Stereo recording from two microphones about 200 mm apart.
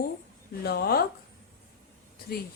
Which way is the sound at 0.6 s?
50° left (ahead or behind).